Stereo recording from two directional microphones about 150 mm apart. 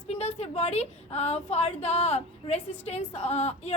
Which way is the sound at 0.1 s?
45° left (ahead or behind).